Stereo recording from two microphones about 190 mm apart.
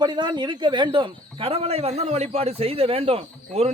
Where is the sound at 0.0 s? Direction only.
25° right (ahead or behind).